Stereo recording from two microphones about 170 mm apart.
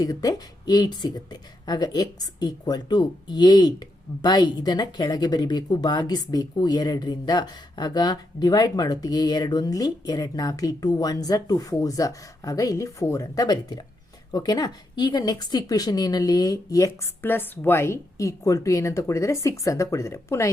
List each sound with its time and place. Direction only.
0.0 s speech: 20° left (ahead or behind)